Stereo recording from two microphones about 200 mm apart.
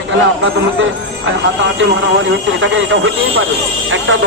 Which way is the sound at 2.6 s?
70° right (ahead or behind).